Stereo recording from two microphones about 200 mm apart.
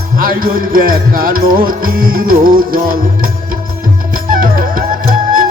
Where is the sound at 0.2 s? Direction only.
45° right (ahead or behind).